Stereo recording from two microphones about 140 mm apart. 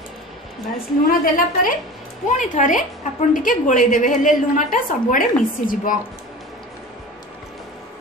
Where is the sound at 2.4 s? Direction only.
65° left (ahead or behind).